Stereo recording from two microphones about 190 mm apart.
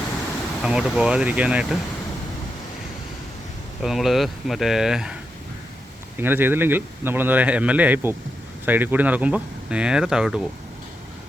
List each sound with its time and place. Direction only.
0.6 s speech: centre (ahead or behind)
3.8 s speech: centre (ahead or behind)
6.1 s speech: 10° right (ahead or behind)